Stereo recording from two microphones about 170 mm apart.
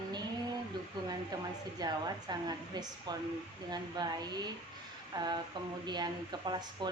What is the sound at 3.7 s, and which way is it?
Speech, 25° right (ahead or behind).